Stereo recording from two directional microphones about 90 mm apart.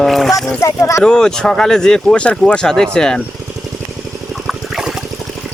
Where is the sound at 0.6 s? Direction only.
30° left (ahead or behind).